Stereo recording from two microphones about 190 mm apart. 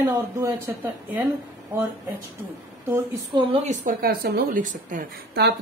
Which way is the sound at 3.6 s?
50° right (ahead or behind).